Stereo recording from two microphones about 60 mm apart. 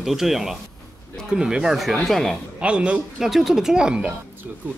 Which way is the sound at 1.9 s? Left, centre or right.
Centre.